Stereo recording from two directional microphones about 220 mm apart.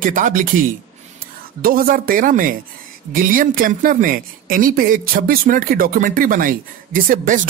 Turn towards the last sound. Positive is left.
turn(degrees=-40)  # may be behind; listen again after turning